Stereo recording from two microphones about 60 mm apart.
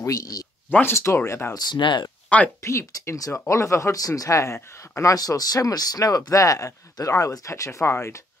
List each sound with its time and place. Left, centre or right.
0.0 s speech: left
0.7 s speech: left
0.9 s speech: left
2.2 s a sound: left
2.6 s speech: left
3.9 s speech: left